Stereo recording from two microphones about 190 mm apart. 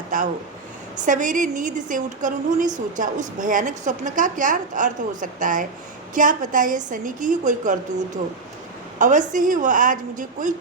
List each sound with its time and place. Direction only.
1.0 s a woman's voice: 40° right (ahead or behind)
9.0 s a woman's voice: 40° right (ahead or behind)